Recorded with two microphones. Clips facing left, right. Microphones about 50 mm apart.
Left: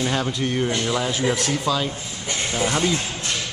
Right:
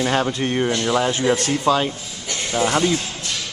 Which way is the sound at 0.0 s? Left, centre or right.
Centre.